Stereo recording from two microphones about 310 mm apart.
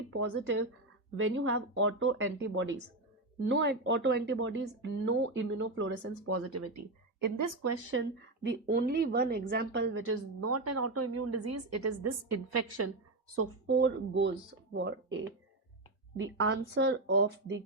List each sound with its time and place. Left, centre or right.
0.2 s speech: right
7.2 s speech: right
7.6 s speech: right
8.4 s a woman's voice: right
13.7 s speech: right